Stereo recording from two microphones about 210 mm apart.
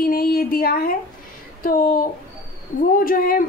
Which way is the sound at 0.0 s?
45° left (ahead or behind).